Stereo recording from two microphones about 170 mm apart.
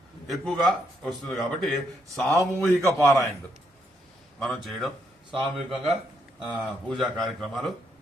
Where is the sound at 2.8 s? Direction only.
15° left (ahead or behind).